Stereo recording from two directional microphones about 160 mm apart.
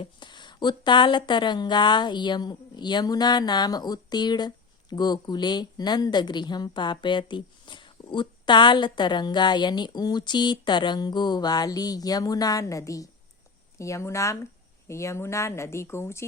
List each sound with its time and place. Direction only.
0.0 s speech: 30° left (ahead or behind)